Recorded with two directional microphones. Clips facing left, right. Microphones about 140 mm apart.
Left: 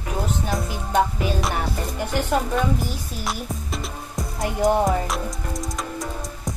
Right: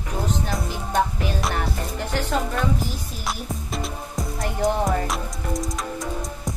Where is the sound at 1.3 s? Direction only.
Centre (ahead or behind).